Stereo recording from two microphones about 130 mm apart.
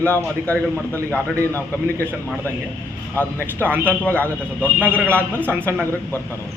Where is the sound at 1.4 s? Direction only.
15° left (ahead or behind).